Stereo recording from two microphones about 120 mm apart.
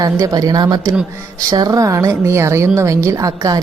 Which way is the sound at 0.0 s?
30° right (ahead or behind).